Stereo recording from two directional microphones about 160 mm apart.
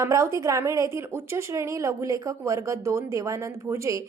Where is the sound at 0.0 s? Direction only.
20° right (ahead or behind).